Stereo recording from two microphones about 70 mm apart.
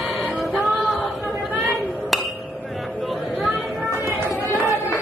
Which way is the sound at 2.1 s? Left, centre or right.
Centre.